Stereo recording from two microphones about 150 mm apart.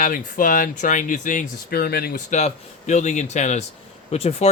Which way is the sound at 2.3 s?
50° left (ahead or behind).